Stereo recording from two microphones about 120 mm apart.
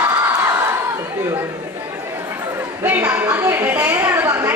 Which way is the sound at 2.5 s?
20° right (ahead or behind).